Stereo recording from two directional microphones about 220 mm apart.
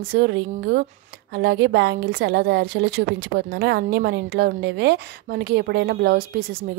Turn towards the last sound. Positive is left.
turn(degrees=-45)  # may be behind; listen again after turning